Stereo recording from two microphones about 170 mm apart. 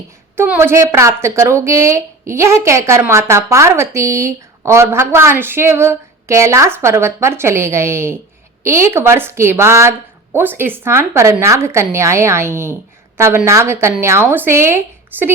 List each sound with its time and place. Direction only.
0.3 s a woman's voice: 10° right (ahead or behind)